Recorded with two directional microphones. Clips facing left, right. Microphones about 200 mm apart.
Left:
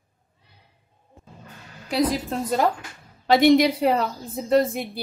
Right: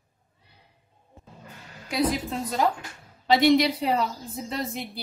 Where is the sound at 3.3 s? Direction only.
50° left (ahead or behind).